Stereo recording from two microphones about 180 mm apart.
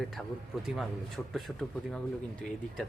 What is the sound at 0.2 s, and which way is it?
Speech, 5° left (ahead or behind).